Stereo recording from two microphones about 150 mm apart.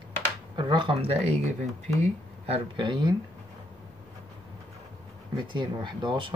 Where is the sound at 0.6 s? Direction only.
30° right (ahead or behind).